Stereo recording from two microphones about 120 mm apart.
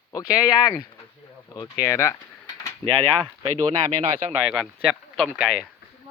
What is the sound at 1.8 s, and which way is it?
Speech, 25° left (ahead or behind).